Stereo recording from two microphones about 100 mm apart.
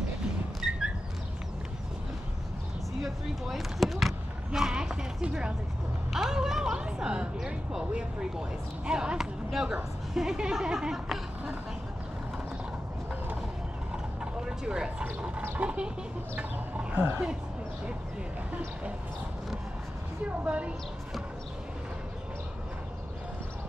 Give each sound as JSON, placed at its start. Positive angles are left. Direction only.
{"t": 0.6, "sound": "a sound", "side_deg": -5}
{"t": 3.0, "sound": "basketball bounce", "side_deg": 0}
{"t": 6.1, "sound": "a woman's voice", "side_deg": -5}
{"t": 13.9, "sound": "vehicle", "side_deg": -5}
{"t": 15.6, "sound": "speech", "side_deg": -10}
{"t": 20.2, "sound": "speech", "side_deg": -15}